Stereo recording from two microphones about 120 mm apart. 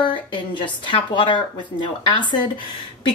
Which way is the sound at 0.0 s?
40° left (ahead or behind).